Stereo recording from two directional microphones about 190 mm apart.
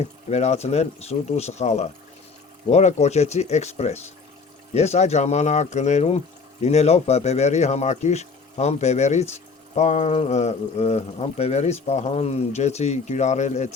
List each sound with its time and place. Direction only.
0.3 s speech: 35° left (ahead or behind)